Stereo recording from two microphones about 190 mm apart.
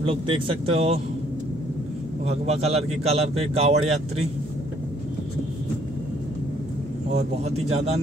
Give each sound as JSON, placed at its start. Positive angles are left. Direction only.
{"t": 0.0, "sound": "speech", "side_deg": -25}
{"t": 2.2, "sound": "speech", "side_deg": -35}
{"t": 7.1, "sound": "speech", "side_deg": -35}